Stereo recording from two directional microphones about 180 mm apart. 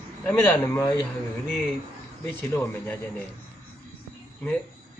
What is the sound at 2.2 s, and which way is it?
Speech, 15° left (ahead or behind).